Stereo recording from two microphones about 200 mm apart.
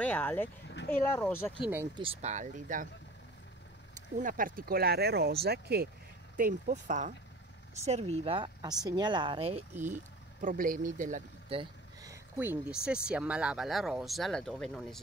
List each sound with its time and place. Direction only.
0.0 s speech: 10° left (ahead or behind)
0.7 s speech: 60° left (ahead or behind)
0.9 s speech: 10° left (ahead or behind)
2.0 s speech: 30° right (ahead or behind)
3.9 s speech: 40° right (ahead or behind)
6.3 s speech: 40° right (ahead or behind)
10.4 s speech: 45° right (ahead or behind)
11.4 s vehicle: 25° right (ahead or behind)
12.1 s speech: 10° right (ahead or behind)